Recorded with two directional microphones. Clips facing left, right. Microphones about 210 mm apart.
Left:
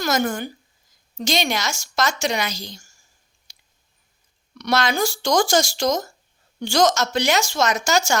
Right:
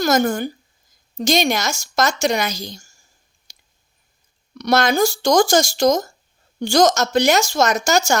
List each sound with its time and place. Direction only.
0.0 s a woman's voice: 40° right (ahead or behind)
3.5 s a sound: 40° right (ahead or behind)
4.5 s a woman's voice: 40° right (ahead or behind)